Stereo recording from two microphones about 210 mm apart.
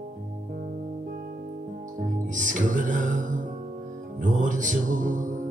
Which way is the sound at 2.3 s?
35° right (ahead or behind).